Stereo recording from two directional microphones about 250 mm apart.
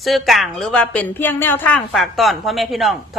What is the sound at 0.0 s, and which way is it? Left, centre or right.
A woman's voice, centre.